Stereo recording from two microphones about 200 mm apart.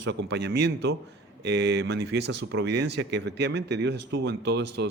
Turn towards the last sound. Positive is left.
turn(degrees=-60)  # may be behind; listen again after turning